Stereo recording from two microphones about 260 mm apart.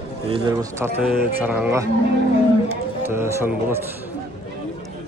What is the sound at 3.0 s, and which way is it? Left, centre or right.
Speech, centre.